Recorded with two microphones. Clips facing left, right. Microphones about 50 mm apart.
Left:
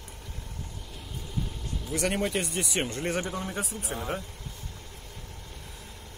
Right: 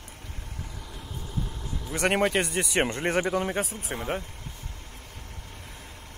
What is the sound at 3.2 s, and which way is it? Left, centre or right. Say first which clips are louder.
Speech: right 6 dB; right.